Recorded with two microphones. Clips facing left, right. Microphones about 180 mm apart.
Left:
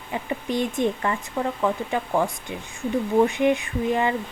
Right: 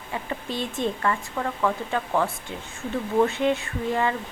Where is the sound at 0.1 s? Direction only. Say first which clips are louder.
Left 4 dB; 15° left (ahead or behind).